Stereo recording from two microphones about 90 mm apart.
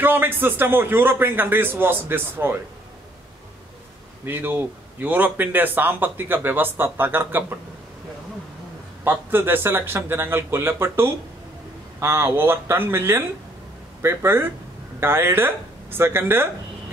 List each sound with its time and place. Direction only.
0.0 s speech: 25° right (ahead or behind)
4.3 s speech: 25° right (ahead or behind)
9.0 s speech: 25° right (ahead or behind)